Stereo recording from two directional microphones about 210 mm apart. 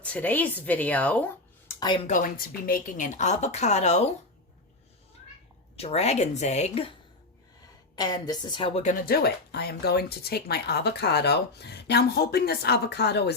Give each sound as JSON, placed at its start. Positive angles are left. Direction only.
{"t": 0.0, "sound": "speech", "side_deg": 5}
{"t": 2.0, "sound": "a woman's voice", "side_deg": 40}
{"t": 5.7, "sound": "a woman's voice", "side_deg": 30}
{"t": 7.9, "sound": "a woman's voice", "side_deg": 20}